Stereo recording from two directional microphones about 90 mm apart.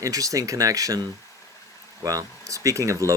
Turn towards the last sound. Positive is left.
turn(degrees=-35)  # may be behind; listen again after turning